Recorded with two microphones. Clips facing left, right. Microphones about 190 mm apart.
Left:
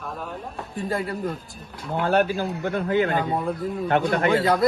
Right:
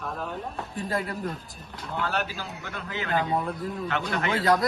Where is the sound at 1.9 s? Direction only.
55° left (ahead or behind).